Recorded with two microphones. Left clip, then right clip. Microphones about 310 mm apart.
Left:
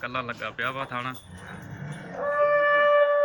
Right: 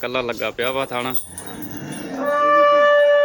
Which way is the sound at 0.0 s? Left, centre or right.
Centre.